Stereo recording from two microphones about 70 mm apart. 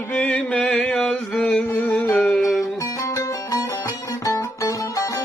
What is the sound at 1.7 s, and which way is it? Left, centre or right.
Music, left.